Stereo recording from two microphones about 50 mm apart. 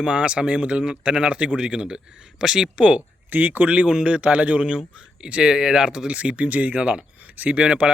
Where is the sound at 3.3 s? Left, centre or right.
Right.